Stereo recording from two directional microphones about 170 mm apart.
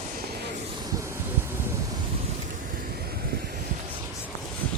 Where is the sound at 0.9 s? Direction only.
15° right (ahead or behind).